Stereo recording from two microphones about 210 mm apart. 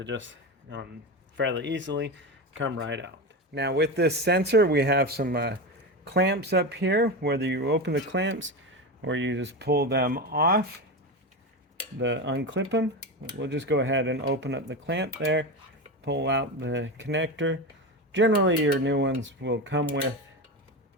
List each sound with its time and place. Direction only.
0.0 s speech: 60° right (ahead or behind)
11.9 s speech: 60° right (ahead or behind)